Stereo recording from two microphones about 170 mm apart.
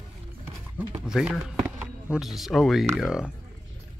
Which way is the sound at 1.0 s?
5° right (ahead or behind).